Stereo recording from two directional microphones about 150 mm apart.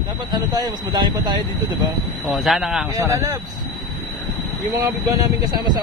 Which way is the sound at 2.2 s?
Centre (ahead or behind).